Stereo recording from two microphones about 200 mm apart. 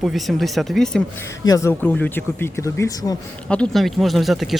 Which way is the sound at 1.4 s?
15° left (ahead or behind).